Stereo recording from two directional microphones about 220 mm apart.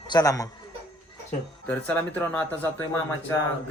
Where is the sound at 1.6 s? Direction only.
10° left (ahead or behind).